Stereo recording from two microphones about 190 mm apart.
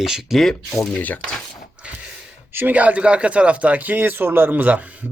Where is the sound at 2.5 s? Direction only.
10° right (ahead or behind).